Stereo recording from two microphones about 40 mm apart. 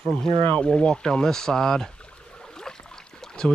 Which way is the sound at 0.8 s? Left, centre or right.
Centre.